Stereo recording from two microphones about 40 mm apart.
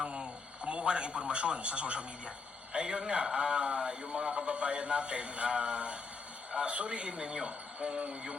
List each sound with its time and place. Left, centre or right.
0.0 s a man's voice: right